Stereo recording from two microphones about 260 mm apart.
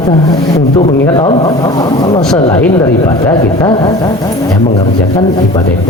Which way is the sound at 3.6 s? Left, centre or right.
Centre.